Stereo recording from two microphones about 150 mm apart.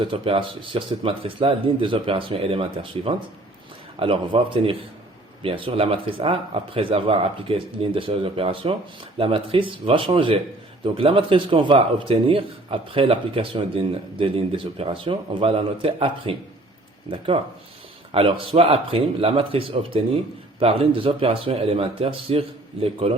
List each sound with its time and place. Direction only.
0.0 s speech: 35° right (ahead or behind)